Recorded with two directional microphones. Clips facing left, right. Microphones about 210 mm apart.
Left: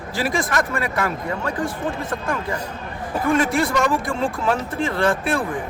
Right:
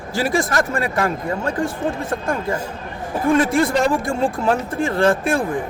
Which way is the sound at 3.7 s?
30° right (ahead or behind).